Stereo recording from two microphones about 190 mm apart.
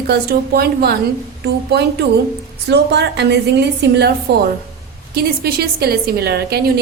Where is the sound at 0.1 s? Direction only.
55° right (ahead or behind).